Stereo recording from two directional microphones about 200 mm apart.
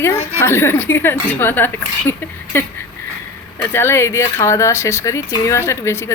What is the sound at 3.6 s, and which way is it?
Speech, 10° left (ahead or behind).